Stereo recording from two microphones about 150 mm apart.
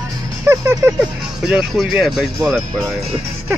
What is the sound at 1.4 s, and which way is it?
Speech, 5° right (ahead or behind).